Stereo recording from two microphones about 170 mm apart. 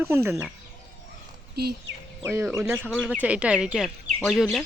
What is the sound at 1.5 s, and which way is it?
Speech, 70° right (ahead or behind).